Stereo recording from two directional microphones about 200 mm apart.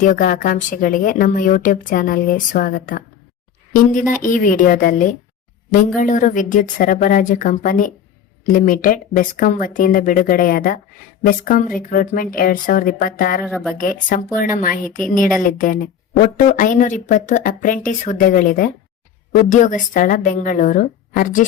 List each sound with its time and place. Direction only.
0.0 s a woman's voice: 40° left (ahead or behind)
13.5 s speech: centre (ahead or behind)
13.7 s a woman's voice: 45° left (ahead or behind)